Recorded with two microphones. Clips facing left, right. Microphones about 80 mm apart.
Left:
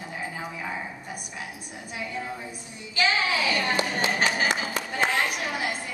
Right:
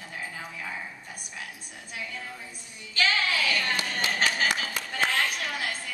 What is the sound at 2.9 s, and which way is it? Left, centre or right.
A woman's voice, centre.